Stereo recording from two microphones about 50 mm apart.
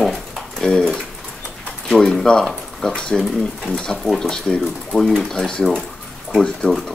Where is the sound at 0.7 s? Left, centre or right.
Centre.